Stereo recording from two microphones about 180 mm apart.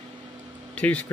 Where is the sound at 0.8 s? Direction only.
5° left (ahead or behind).